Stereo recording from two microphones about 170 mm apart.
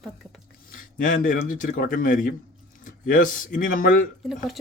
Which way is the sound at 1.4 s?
50° left (ahead or behind).